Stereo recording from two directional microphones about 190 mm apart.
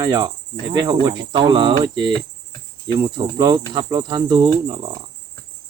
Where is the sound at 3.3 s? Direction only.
20° right (ahead or behind).